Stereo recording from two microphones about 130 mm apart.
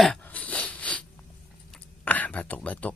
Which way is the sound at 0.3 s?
10° left (ahead or behind).